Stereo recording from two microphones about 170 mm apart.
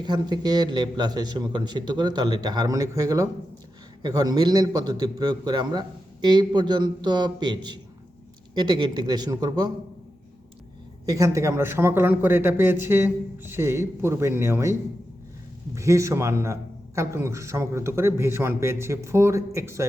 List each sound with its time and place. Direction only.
0.0 s a man's voice: 25° right (ahead or behind)
11.0 s a man's voice: 20° right (ahead or behind)